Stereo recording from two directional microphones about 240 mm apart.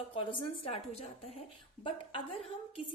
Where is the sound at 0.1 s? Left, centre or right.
Left.